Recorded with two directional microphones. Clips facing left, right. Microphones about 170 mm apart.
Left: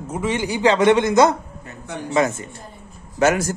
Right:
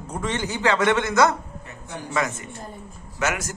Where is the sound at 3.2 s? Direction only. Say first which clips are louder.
Left 9 dB; 30° left (ahead or behind).